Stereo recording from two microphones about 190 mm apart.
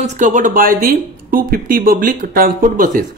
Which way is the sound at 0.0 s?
40° right (ahead or behind).